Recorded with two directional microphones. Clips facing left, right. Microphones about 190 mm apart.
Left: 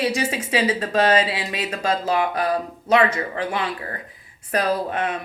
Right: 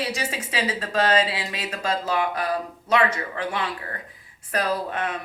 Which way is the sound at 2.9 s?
20° left (ahead or behind).